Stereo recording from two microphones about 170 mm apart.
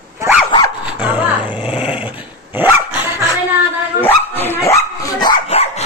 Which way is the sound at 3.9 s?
10° left (ahead or behind).